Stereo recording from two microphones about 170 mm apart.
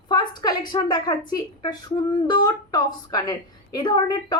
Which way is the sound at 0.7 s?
25° left (ahead or behind).